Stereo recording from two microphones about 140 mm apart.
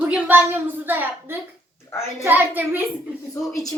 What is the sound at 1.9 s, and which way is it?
Speech, 20° left (ahead or behind).